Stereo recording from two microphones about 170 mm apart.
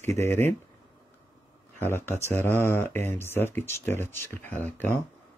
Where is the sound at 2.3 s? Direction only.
10° left (ahead or behind).